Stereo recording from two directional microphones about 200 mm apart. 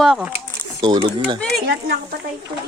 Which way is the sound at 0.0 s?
Centre (ahead or behind).